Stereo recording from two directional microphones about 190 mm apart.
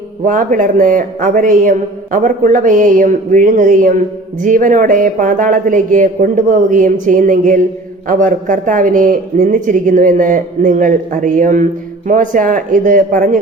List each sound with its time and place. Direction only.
0.3 s speech: 45° right (ahead or behind)